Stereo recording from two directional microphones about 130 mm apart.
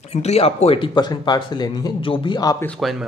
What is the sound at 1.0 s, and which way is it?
Speech, 30° left (ahead or behind).